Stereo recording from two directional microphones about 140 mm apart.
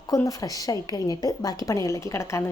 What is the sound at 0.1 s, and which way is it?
A woman's voice, 25° left (ahead or behind).